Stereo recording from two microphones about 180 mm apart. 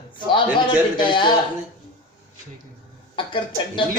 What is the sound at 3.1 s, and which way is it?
Speech, 30° left (ahead or behind).